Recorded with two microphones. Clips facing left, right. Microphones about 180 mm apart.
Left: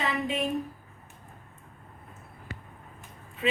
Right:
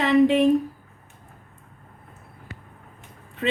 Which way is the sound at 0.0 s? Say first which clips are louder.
Right 13 dB; 85° right.